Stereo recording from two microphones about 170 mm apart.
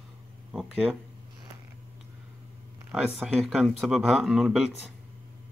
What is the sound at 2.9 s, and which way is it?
Speech, 5° right (ahead or behind).